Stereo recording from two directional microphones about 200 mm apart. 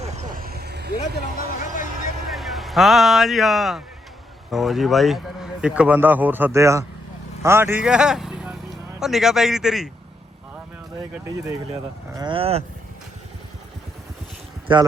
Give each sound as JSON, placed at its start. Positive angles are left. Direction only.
{"t": 0.0, "sound": "vehicle", "side_deg": -40}
{"t": 0.9, "sound": "speech", "side_deg": 40}
{"t": 2.3, "sound": "speech", "side_deg": 0}
{"t": 12.1, "sound": "speech", "side_deg": -25}
{"t": 14.7, "sound": "speech", "side_deg": -25}